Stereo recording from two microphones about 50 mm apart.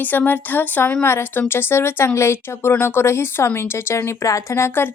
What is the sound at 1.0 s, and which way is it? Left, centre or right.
A woman's voice, left.